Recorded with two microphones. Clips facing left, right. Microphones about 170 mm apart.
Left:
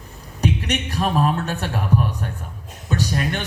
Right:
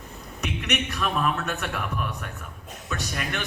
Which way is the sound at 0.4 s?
35° left (ahead or behind).